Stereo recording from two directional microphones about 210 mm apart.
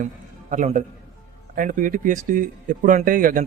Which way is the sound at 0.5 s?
35° right (ahead or behind).